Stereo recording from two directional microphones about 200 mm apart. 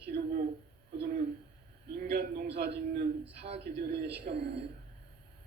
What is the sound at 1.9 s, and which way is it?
A man's voice, 50° right (ahead or behind).